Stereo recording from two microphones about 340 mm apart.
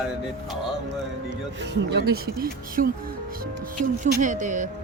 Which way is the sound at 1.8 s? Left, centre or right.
Right.